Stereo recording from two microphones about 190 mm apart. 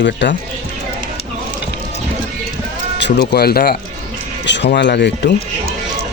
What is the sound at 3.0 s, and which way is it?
Speech, 60° left (ahead or behind).